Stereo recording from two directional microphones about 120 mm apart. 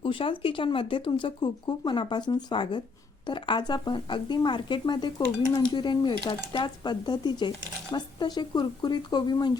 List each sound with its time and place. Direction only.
0.0 s speech: 45° left (ahead or behind)